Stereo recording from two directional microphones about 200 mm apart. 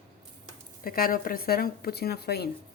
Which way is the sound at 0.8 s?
45° left (ahead or behind).